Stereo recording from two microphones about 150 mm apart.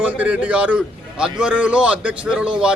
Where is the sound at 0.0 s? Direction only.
10° right (ahead or behind).